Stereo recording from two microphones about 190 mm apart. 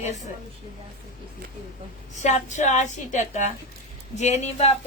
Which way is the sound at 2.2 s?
40° left (ahead or behind).